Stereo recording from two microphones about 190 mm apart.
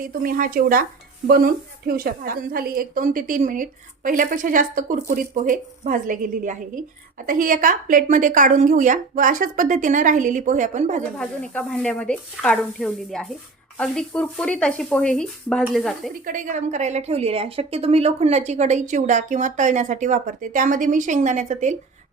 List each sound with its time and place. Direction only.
0.0 s a woman's voice: 50° right (ahead or behind)
11.2 s speech: 5° left (ahead or behind)
16.2 s a woman's voice: 45° right (ahead or behind)